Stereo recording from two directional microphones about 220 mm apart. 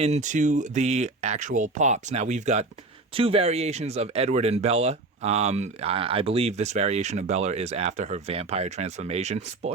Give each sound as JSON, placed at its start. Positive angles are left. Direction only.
{"t": 0.0, "sound": "speech", "side_deg": -30}